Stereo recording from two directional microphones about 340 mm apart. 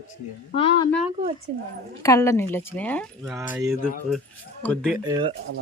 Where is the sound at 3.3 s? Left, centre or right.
Centre.